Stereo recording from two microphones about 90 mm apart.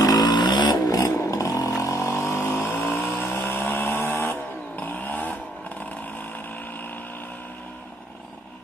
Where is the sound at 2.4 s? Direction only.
20° left (ahead or behind).